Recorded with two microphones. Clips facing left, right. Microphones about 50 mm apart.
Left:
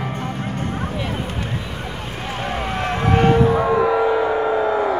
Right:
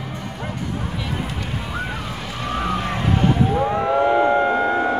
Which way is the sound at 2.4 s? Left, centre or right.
Left.